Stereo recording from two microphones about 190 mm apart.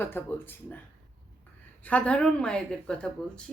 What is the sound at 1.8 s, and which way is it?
Speech, 5° left (ahead or behind).